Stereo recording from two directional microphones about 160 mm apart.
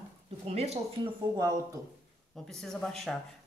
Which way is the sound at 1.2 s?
25° right (ahead or behind).